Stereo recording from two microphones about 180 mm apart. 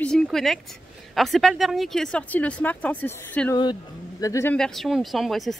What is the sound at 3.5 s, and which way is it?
Speech, 25° left (ahead or behind).